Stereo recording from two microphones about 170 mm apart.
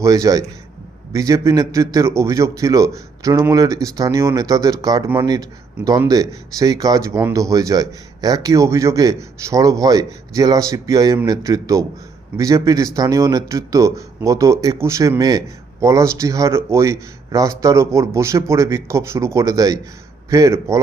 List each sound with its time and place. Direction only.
0.0 s a man's voice: 20° right (ahead or behind)